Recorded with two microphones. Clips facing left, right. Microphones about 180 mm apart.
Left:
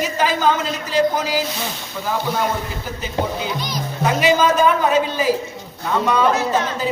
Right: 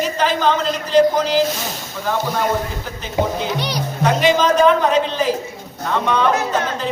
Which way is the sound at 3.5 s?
70° right (ahead or behind).